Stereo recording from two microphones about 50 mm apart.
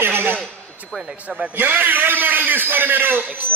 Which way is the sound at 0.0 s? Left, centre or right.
Right.